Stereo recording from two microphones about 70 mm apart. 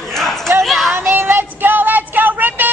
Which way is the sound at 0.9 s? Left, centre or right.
Right.